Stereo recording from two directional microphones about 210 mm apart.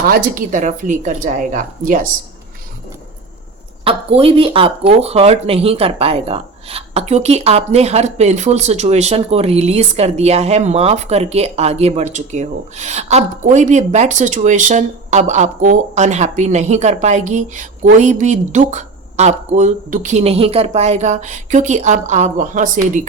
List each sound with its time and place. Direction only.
0.0 s speech: 45° right (ahead or behind)
3.8 s speech: 25° right (ahead or behind)